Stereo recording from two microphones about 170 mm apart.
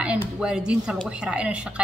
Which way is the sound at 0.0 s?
5° right (ahead or behind).